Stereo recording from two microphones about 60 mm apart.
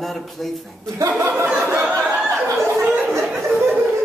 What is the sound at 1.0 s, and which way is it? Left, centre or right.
Speech, right.